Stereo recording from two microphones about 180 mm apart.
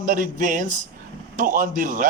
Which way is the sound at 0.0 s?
45° right (ahead or behind).